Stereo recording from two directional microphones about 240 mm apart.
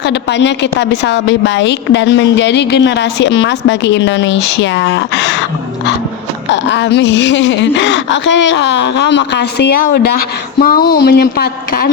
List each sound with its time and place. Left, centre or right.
0.0 s a woman's voice: left